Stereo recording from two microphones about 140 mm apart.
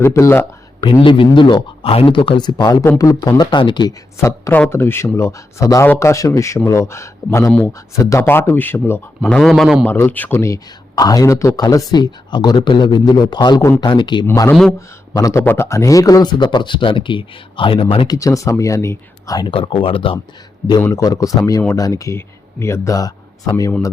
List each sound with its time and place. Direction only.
0.0 s speech: 20° left (ahead or behind)
0.9 s speech: 40° left (ahead or behind)
4.2 s speech: 20° left (ahead or behind)
9.3 s a man's voice: centre (ahead or behind)
9.8 s speech: 15° left (ahead or behind); by 14.3 s 35° left (ahead or behind)
14.3 s speech: 20° left (ahead or behind)
14.5 s a man's voice: 5° left (ahead or behind)
15.1 s speech: 25° left (ahead or behind); by 18.1 s 40° left (ahead or behind)
18.1 s speech: 25° left (ahead or behind)
19.5 s speech: 40° left (ahead or behind)
20.9 s speech: 25° left (ahead or behind)